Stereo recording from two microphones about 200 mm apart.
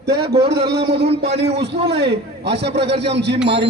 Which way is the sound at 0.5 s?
55° right (ahead or behind).